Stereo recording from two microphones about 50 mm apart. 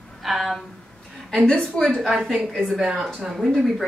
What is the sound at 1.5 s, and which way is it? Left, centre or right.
Speech, centre.